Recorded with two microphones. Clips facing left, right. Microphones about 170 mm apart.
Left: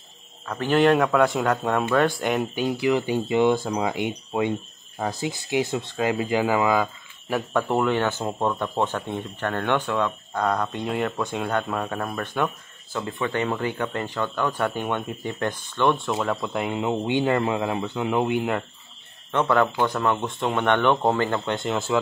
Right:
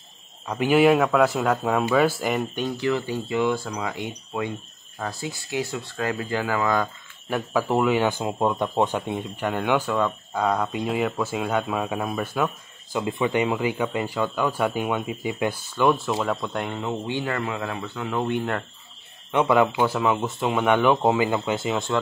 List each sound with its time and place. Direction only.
0.5 s speech: 10° right (ahead or behind)
16.7 s speech: 20° left (ahead or behind)
19.3 s speech: 10° right (ahead or behind)